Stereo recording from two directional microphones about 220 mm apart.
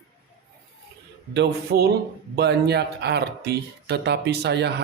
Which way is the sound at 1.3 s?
50° right (ahead or behind).